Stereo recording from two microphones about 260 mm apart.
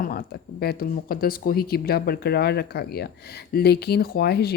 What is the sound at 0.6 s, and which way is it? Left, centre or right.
Speech, left.